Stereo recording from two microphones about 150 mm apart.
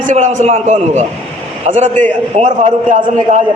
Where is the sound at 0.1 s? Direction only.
55° right (ahead or behind).